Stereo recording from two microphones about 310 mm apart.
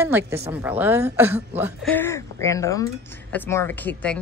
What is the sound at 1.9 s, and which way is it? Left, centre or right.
Speech, centre.